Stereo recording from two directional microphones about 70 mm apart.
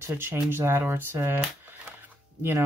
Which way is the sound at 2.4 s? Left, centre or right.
Right.